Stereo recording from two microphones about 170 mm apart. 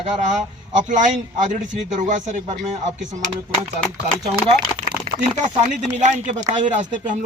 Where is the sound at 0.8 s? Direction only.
45° right (ahead or behind).